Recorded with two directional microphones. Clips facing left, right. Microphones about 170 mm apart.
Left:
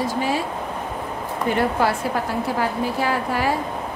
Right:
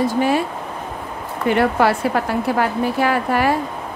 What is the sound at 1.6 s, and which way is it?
Speech, 70° right (ahead or behind).